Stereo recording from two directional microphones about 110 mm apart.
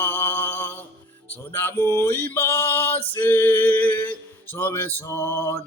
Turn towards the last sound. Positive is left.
turn(degrees=20)  # may be behind; listen again after turning